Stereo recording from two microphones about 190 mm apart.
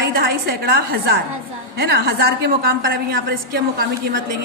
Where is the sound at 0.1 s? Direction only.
55° right (ahead or behind).